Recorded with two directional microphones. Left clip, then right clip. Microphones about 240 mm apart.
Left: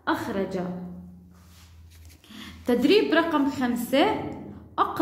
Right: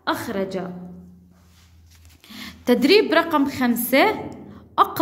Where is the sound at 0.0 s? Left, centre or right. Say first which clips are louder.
Right 3 dB; right.